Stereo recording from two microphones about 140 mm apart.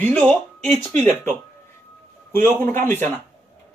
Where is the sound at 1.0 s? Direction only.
55° right (ahead or behind).